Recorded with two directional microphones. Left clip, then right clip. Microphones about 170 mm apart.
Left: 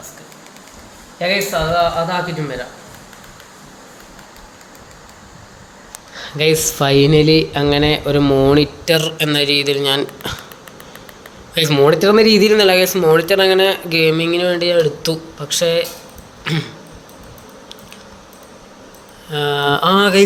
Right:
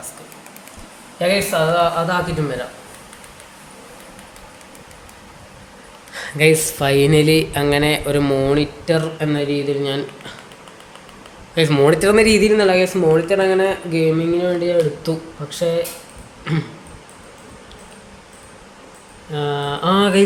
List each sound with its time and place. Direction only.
1.2 s speech: 30° right (ahead or behind)
6.3 s speech: 15° left (ahead or behind)
8.8 s speech: 50° left (ahead or behind)
11.5 s speech: 45° left (ahead or behind)
11.8 s speech: 20° left (ahead or behind)
12.4 s speech: 40° left (ahead or behind)
16.4 s a sound: 45° left (ahead or behind)
19.3 s mantra: 40° left (ahead or behind)